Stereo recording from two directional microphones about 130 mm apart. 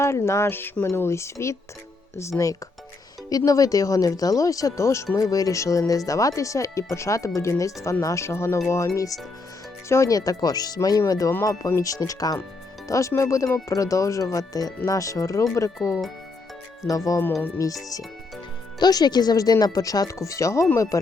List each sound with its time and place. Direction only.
0.0 s speech: 20° left (ahead or behind)
3.2 s speech: 25° left (ahead or behind)
9.9 s speech: 25° left (ahead or behind)
17.1 s speech: 20° left (ahead or behind)
18.8 s speech: 30° left (ahead or behind)